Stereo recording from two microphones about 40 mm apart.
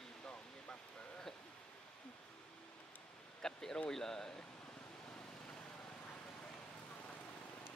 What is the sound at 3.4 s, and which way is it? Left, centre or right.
Speech, centre.